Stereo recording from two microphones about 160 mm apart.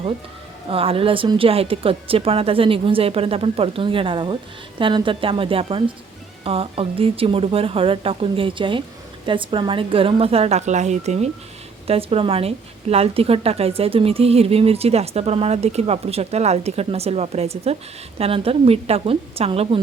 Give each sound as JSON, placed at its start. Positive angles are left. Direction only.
{"t": 0.7, "sound": "a woman's voice", "side_deg": -35}